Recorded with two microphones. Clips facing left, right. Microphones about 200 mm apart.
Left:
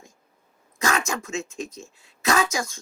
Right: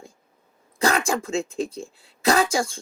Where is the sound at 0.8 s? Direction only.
35° right (ahead or behind).